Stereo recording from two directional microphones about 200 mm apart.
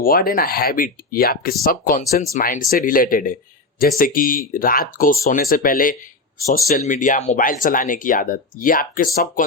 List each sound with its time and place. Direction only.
0.0 s speech: 45° left (ahead or behind)